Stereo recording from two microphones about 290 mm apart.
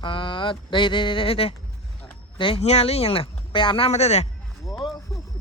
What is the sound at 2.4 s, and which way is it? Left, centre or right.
Speech, centre.